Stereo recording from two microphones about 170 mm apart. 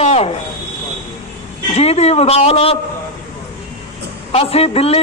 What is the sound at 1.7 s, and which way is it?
A man's voice, 40° left (ahead or behind).